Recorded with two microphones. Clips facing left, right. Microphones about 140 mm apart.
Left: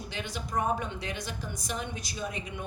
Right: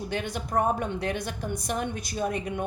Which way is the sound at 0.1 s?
50° right (ahead or behind).